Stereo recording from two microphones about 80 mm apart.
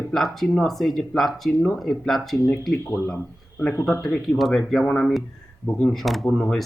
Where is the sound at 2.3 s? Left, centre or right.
Left.